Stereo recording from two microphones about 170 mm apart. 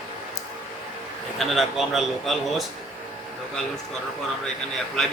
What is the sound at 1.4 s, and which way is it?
A man's voice, centre (ahead or behind).